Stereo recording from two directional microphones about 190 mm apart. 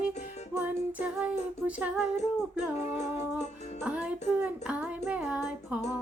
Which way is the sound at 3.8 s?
5° right (ahead or behind).